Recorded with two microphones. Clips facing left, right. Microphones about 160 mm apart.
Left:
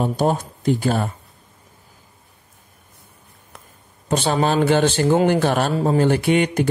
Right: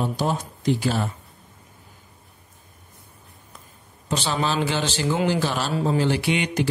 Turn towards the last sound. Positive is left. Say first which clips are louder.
# left 6 dB
turn(degrees=50)  # may be behind; listen again after turning